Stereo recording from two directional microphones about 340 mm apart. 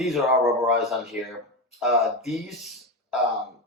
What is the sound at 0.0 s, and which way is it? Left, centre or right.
Speech, centre.